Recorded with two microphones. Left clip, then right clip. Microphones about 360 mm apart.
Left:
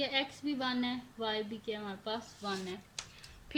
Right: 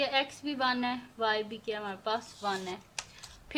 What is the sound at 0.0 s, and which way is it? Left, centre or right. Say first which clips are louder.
A woman's voice: right 4 dB; centre.